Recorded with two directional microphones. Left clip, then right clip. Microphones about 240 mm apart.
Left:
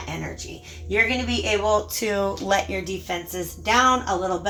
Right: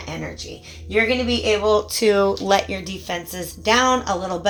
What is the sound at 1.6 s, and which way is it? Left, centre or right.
Speech, right.